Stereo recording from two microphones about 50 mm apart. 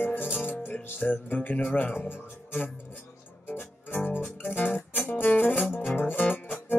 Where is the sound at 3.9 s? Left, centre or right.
Left.